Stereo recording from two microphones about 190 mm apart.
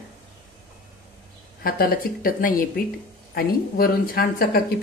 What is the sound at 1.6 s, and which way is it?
A woman's voice, 50° left (ahead or behind).